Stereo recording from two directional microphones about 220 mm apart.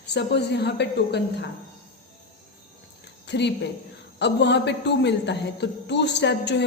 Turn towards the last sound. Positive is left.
turn(degrees=50)  # may be behind; listen again after turning